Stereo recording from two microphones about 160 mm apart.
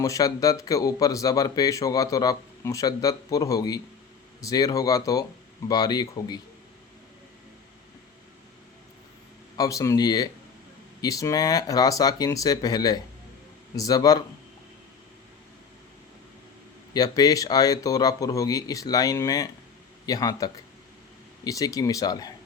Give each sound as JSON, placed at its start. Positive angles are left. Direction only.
{"t": 0.0, "sound": "speech", "side_deg": 20}
{"t": 9.6, "sound": "speech", "side_deg": 20}
{"t": 16.9, "sound": "speech", "side_deg": 25}